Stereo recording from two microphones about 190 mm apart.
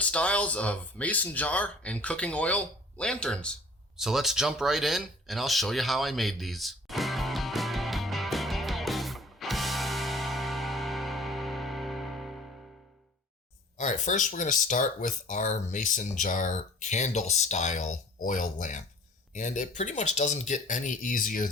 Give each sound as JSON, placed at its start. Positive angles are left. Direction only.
{"t": 0.0, "sound": "speech", "side_deg": 5}
{"t": 3.9, "sound": "a sound", "side_deg": 0}
{"t": 13.7, "sound": "speech", "side_deg": 40}